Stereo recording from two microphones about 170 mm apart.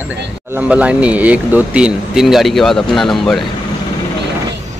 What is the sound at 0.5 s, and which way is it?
Speech, 10° right (ahead or behind).